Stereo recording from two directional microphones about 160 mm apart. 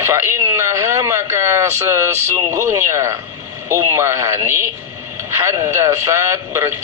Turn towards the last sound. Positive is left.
turn(degrees=-15)  # may be behind; listen again after turning